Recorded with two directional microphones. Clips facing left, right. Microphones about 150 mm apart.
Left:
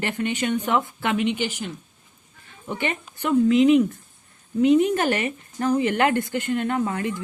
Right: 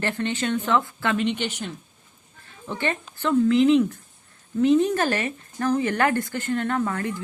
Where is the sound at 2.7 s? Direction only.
15° left (ahead or behind).